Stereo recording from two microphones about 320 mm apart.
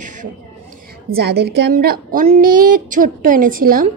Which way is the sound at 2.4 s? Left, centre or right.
Right.